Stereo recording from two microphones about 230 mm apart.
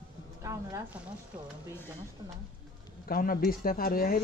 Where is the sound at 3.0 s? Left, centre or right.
Left.